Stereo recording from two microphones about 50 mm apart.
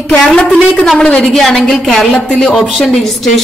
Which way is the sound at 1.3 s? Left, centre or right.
Centre.